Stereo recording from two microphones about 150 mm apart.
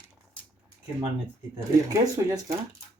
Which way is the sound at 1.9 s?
20° right (ahead or behind).